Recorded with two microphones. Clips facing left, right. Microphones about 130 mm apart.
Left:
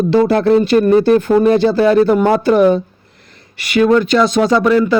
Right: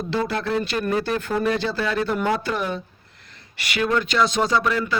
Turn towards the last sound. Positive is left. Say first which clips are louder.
# left 10 dB
turn(degrees=45)  # may be behind; listen again after turning